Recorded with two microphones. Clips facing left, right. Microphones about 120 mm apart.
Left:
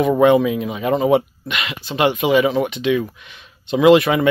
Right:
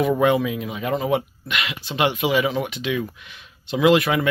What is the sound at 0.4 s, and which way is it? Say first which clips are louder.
Speech: left 5 dB; centre (ahead or behind).